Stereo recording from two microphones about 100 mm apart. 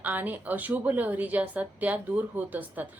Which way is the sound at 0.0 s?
15° right (ahead or behind).